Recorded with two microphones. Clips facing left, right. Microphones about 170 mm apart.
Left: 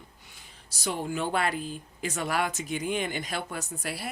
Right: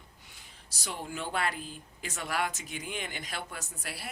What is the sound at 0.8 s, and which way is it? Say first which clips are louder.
Speech: left 7 dB; 60° left (ahead or behind).